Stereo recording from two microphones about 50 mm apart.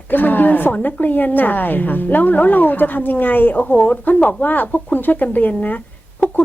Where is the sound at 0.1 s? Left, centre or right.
Left.